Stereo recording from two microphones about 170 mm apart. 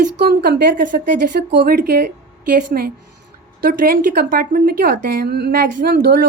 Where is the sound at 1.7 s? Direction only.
65° right (ahead or behind).